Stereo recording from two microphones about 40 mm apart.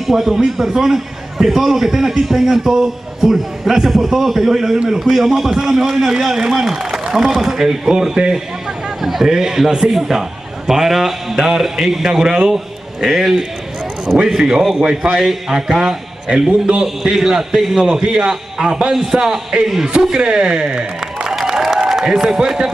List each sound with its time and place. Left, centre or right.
0.0 s a man's voice: centre
9.0 s a man's voice: centre
21.5 s applause: centre